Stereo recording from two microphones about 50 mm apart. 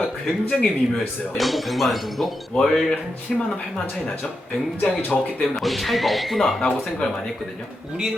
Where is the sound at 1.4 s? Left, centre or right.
Centre.